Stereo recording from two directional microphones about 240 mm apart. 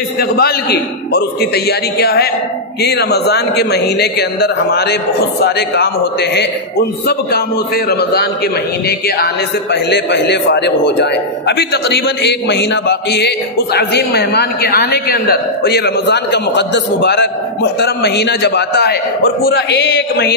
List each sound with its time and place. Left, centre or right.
0.2 s a man's voice: left
7.1 s a man's voice: left